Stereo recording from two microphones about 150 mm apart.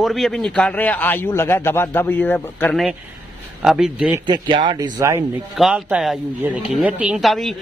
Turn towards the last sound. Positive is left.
turn(degrees=0)  # may be behind; listen again after turning